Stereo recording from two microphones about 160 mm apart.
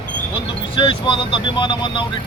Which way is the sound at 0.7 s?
30° left (ahead or behind).